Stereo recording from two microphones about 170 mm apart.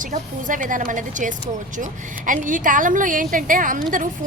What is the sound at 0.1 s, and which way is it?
A woman's voice, 50° right (ahead or behind).